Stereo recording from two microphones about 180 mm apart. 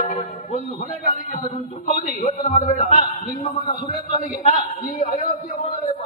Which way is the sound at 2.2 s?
40° left (ahead or behind).